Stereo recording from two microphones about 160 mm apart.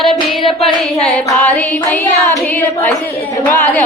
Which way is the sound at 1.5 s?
10° left (ahead or behind).